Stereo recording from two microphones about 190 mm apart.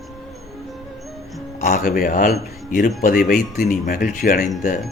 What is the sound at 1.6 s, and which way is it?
Speech, 45° left (ahead or behind).